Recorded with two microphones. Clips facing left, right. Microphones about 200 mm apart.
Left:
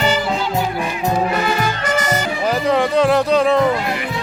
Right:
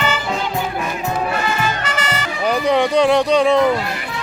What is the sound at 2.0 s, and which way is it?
Music, 50° left (ahead or behind).